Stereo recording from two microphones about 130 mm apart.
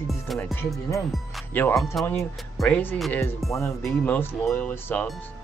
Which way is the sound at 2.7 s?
15° left (ahead or behind).